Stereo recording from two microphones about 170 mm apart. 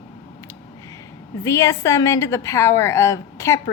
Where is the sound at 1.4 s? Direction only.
20° left (ahead or behind).